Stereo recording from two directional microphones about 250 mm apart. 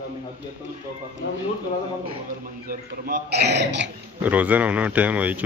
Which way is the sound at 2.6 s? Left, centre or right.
Right.